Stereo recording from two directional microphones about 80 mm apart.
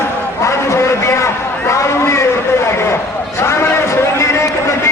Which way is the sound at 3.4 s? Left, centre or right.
Left.